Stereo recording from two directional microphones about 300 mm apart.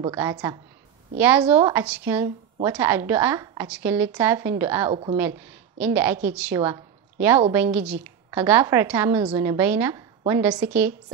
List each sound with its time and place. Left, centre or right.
0.0 s a woman's voice: centre